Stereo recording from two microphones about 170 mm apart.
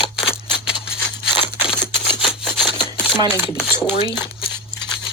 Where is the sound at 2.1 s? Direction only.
30° left (ahead or behind).